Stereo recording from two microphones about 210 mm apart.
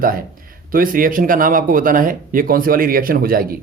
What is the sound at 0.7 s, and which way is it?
Speech, 40° right (ahead or behind).